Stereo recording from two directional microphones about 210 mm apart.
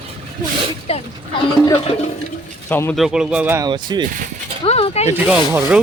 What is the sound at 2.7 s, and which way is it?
Speech, 10° left (ahead or behind).